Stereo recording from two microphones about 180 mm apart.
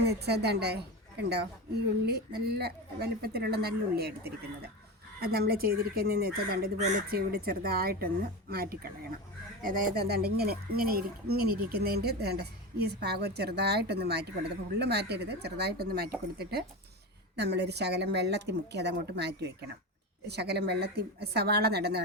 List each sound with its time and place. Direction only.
0.0 s a woman's voice: 65° right (ahead or behind)
6.7 s speech: 40° right (ahead or behind)
7.1 s a woman's voice: 55° right (ahead or behind)